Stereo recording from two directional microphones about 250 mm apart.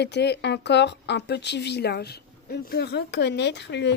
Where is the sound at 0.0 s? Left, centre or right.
Left.